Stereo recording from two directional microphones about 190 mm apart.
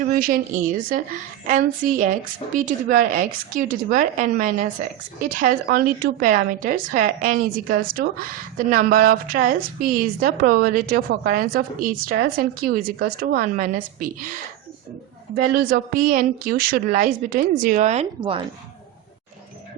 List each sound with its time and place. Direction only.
0.0 s a woman's voice: 45° right (ahead or behind)
15.4 s a woman's voice: 50° right (ahead or behind)